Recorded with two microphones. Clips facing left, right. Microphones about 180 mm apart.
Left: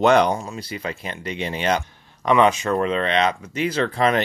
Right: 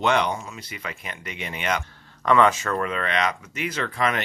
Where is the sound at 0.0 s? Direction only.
40° left (ahead or behind).